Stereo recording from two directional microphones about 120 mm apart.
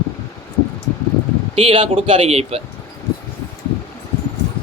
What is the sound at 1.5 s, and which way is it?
A man's voice, 50° right (ahead or behind).